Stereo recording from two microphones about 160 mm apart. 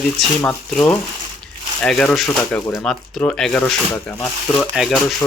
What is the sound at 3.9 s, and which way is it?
Speech, 15° left (ahead or behind).